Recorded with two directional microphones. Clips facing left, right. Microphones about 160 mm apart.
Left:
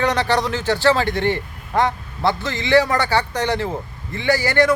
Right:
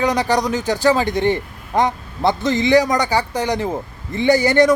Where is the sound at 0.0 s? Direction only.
15° right (ahead or behind).